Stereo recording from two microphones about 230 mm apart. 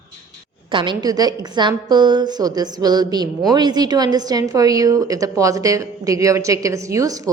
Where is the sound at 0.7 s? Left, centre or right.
Right.